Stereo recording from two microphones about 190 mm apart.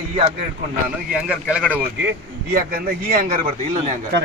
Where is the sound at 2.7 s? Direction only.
45° right (ahead or behind).